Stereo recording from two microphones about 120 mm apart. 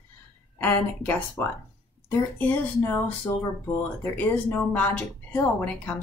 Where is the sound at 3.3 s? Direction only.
35° left (ahead or behind).